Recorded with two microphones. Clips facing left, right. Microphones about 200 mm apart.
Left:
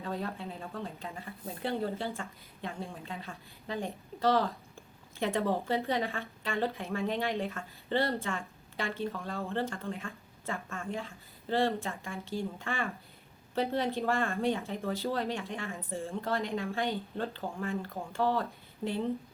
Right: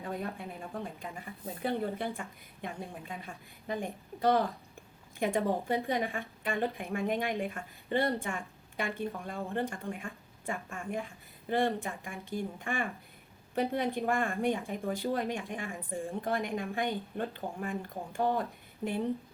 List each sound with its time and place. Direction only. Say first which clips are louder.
0.0 s a woman's voice: left 1 dB; 15° right (ahead or behind)